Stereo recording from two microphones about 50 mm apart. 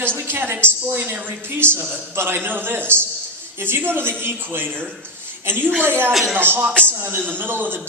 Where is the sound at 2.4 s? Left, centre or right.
Right.